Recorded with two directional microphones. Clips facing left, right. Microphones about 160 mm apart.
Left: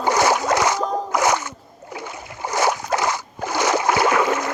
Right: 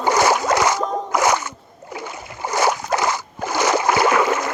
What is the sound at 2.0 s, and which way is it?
Boat, 90° right.